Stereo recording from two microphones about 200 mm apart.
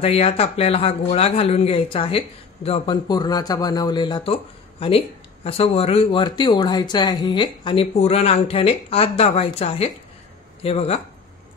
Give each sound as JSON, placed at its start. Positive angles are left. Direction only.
{"t": 0.0, "sound": "speech", "side_deg": 30}